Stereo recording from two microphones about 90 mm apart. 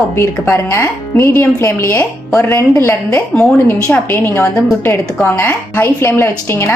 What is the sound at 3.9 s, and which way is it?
Speech, 25° left (ahead or behind).